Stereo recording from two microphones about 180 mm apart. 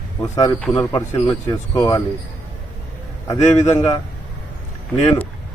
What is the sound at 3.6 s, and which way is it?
Speech, 20° left (ahead or behind).